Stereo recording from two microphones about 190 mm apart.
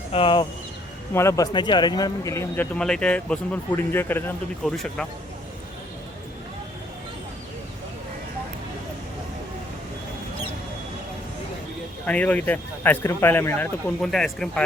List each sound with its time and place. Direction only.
0.1 s speech: 30° left (ahead or behind)
1.1 s speech: 15° left (ahead or behind)
12.0 s speech: 5° left (ahead or behind)